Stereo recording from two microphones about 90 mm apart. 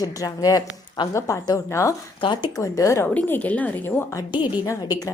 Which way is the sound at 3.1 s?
20° left (ahead or behind).